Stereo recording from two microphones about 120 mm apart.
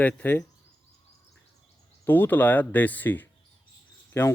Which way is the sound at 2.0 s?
15° left (ahead or behind).